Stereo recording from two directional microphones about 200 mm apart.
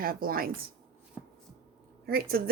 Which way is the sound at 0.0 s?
45° right (ahead or behind).